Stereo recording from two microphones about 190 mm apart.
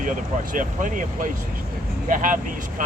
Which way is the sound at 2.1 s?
45° right (ahead or behind).